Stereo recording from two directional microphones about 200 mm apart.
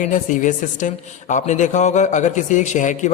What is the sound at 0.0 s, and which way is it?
Speech, 40° left (ahead or behind).